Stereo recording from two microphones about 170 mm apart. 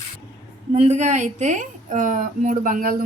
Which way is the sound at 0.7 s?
40° right (ahead or behind).